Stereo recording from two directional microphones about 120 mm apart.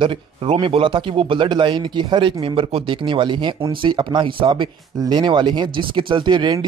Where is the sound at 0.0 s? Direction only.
45° right (ahead or behind).